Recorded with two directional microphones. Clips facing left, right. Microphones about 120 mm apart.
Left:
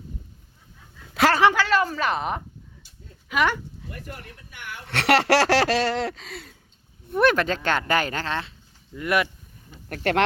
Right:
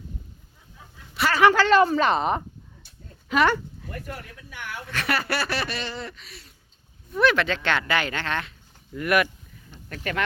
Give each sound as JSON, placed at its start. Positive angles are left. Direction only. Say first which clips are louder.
{"t": 1.5, "sound": "speech", "louder": "right 4 dB", "side_deg": 5}
{"t": 3.2, "sound": "speech", "louder": "right 2 dB", "side_deg": 15}
{"t": 4.5, "sound": "speech", "louder": "right 3 dB", "side_deg": -50}
{"t": 4.9, "sound": "speech", "louder": "left 8 dB", "side_deg": 80}
{"t": 7.1, "sound": "speech", "louder": "left 1 dB", "side_deg": 50}
{"t": 9.9, "sound": "speech", "louder": "left 7 dB", "side_deg": 75}